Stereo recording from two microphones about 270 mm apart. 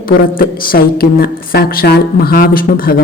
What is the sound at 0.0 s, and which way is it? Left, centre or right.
A woman's voice, left.